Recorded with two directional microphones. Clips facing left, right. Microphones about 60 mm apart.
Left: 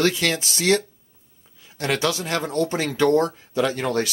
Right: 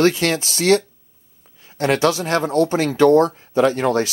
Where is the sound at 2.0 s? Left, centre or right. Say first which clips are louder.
Right 6 dB; right.